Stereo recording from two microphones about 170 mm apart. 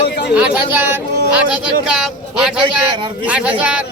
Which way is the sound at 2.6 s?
25° right (ahead or behind).